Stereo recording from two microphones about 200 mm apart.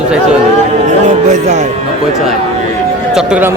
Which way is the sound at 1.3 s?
35° right (ahead or behind).